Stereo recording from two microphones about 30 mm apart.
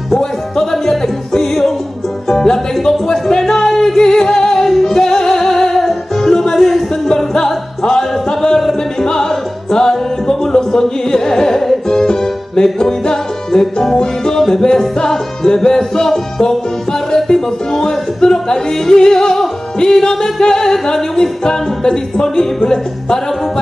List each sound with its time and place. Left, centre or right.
0.2 s music: centre
3.4 s singing: centre
4.6 s music: centre
4.9 s music: left
6.5 s a sound: centre
7.3 s music: left